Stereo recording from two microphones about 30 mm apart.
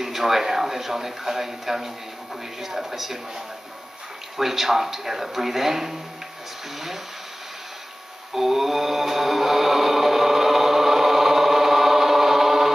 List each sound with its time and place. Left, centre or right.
0.0 s speech: centre
4.4 s speech: centre
8.4 s mantra: centre